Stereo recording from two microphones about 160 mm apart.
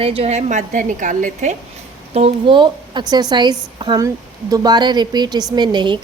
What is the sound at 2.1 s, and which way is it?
A woman's voice, 35° right (ahead or behind).